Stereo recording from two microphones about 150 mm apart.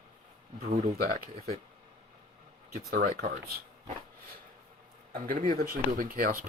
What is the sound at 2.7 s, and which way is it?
Speech, 90° right.